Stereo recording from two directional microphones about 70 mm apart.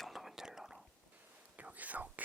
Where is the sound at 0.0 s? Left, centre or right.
Centre.